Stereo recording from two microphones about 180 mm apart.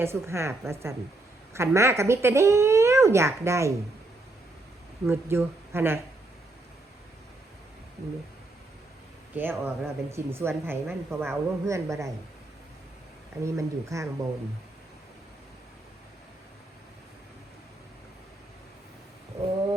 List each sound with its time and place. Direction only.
0.0 s speech: 15° right (ahead or behind)
5.0 s speech: 15° right (ahead or behind)
9.3 s speech: 10° right (ahead or behind)
13.4 s speech: 15° right (ahead or behind)